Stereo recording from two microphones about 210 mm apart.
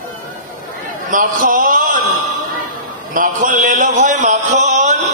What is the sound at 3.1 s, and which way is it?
A man's voice, 40° right (ahead or behind).